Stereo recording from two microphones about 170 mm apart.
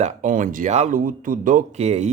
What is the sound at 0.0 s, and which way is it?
Speech, 50° right (ahead or behind).